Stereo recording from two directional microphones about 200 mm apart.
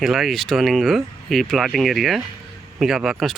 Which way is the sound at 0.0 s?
Centre (ahead or behind).